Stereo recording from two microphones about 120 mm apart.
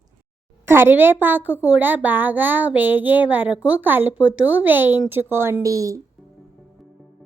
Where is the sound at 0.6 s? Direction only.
20° right (ahead or behind).